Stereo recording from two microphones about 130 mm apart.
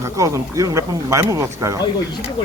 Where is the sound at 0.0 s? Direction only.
25° right (ahead or behind).